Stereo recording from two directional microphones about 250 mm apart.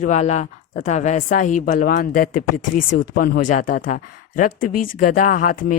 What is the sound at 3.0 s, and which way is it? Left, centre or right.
Speech, left.